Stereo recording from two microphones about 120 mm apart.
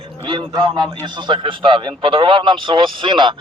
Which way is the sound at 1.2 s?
45° right (ahead or behind).